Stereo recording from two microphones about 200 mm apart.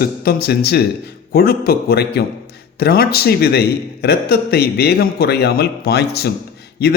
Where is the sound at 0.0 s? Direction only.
50° left (ahead or behind).